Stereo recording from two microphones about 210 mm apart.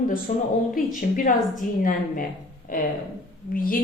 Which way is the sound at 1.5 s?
40° left (ahead or behind).